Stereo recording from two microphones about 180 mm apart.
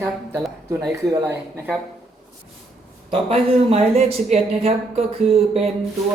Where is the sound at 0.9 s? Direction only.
15° right (ahead or behind).